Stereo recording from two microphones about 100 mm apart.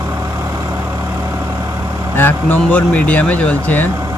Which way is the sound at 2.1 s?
20° left (ahead or behind).